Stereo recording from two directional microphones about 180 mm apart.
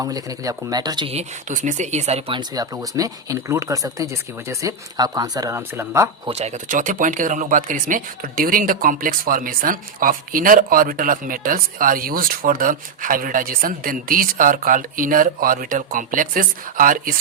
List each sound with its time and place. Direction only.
0.0 s speech: 20° right (ahead or behind)
1.5 s speech: 45° right (ahead or behind); by 6.1 s 15° right (ahead or behind)
6.2 s speech: 35° right (ahead or behind)